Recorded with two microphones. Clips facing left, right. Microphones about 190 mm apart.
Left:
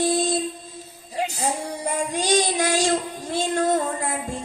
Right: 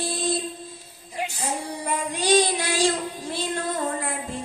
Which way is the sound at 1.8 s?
45° left (ahead or behind).